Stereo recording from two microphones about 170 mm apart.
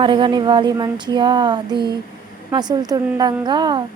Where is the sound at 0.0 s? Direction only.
30° right (ahead or behind).